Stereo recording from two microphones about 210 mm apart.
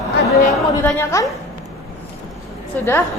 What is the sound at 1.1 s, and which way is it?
Speech, 15° left (ahead or behind).